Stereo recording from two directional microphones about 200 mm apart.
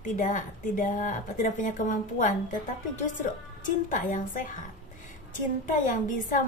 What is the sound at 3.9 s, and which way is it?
Speech, 40° left (ahead or behind).